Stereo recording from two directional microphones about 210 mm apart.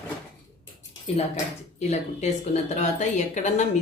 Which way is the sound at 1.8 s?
35° left (ahead or behind).